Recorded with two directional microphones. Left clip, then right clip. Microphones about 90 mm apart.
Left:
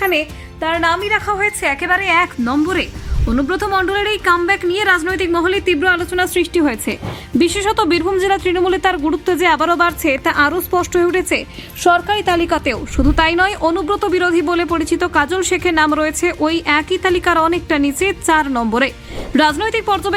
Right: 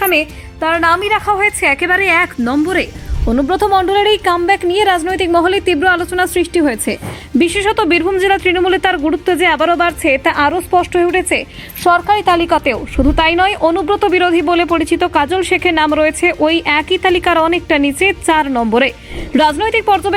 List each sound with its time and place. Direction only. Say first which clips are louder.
0.0 s music: right 3 dB; 70° right (ahead or behind)
0.6 s speech: right 3 dB; 40° right (ahead or behind)
0.9 s a woman's voice: right 4 dB; 60° right (ahead or behind)
1.1 s speech: right 3 dB; 40° right (ahead or behind)
3.2 s speech: right 5 dB; 20° right (ahead or behind)
5.3 s speech: right 4 dB; 40° right (ahead or behind)
6.7 s a woman's voice: right 3 dB; 55° right (ahead or behind)
7.3 s speech: right 2 dB; 30° right (ahead or behind)
11.8 s speech: right 2 dB; 50° right (ahead or behind)
14.9 s speech: right 1 dB; 30° right (ahead or behind)